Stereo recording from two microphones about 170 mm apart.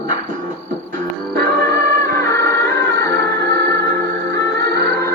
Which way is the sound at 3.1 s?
90° right.